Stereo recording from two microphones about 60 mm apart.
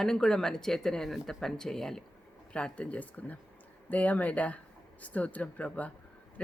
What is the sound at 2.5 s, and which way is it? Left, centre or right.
Speech, centre.